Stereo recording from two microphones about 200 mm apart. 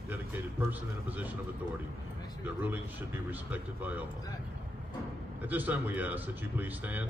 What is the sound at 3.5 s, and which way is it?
Speech, 10° right (ahead or behind).